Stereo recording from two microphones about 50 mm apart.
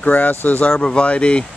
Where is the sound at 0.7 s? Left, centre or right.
Centre.